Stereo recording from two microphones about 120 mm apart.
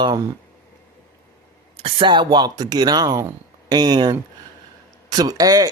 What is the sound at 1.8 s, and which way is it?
Speech, 50° right (ahead or behind).